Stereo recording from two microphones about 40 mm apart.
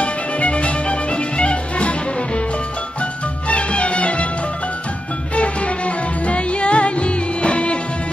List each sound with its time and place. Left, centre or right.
0.0 s music: left
3.4 s music: left
5.3 s music: left